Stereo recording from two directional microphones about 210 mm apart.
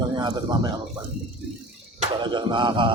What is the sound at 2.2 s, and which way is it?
Speech, 20° right (ahead or behind).